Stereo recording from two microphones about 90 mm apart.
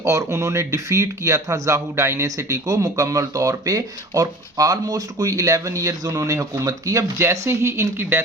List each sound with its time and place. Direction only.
0.0 s speech: 35° right (ahead or behind)